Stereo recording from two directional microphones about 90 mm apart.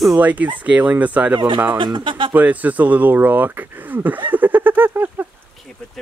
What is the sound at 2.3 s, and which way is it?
Speech, 15° right (ahead or behind).